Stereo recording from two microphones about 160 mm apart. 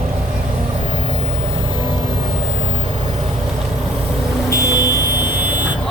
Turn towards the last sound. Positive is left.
turn(degrees=20)  # may be behind; listen again after turning